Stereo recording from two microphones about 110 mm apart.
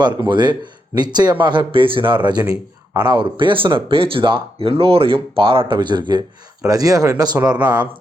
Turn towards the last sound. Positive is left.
turn(degrees=-40)  # may be behind; listen again after turning